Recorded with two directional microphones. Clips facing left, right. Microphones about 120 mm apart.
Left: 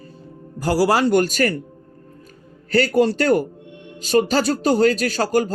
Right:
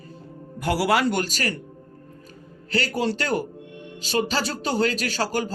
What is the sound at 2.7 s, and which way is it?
Speech, 45° left (ahead or behind).